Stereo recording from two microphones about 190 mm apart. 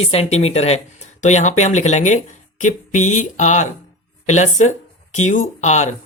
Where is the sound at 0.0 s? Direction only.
35° left (ahead or behind).